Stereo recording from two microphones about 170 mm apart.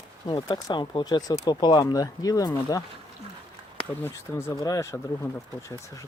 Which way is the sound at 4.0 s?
15° left (ahead or behind).